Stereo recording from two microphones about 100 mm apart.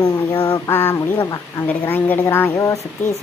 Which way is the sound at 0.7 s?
25° left (ahead or behind).